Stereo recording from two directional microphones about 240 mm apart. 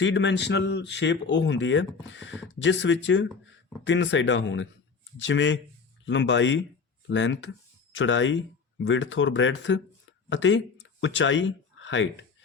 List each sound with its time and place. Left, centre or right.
0.0 s speech: left